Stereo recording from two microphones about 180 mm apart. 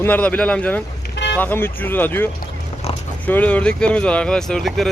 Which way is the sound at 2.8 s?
35° left (ahead or behind).